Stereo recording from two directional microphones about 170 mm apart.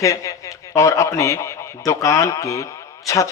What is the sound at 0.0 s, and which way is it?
A woman's voice, 20° left (ahead or behind).